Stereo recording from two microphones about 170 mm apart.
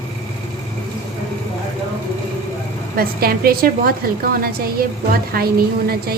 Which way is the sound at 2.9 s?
60° right (ahead or behind).